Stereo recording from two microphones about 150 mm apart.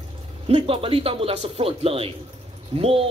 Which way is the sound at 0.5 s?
35° right (ahead or behind).